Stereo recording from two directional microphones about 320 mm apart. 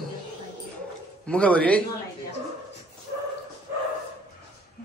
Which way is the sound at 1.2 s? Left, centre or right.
Centre.